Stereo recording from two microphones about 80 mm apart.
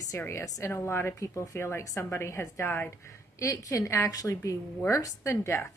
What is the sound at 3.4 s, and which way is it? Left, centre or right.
A woman's voice, left.